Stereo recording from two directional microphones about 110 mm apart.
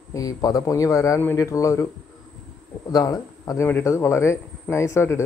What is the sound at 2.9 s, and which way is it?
Speech, 30° left (ahead or behind).